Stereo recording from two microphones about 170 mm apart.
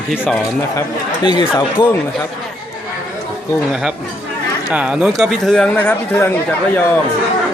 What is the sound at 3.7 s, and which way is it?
Speech, 5° right (ahead or behind).